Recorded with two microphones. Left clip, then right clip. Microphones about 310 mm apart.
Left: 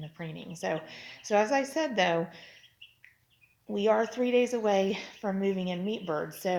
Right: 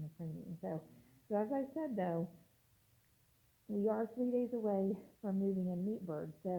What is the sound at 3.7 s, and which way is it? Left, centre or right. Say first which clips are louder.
A woman's voice: left 11 dB; centre.